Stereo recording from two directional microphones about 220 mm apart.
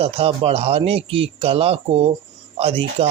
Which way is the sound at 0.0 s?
25° right (ahead or behind).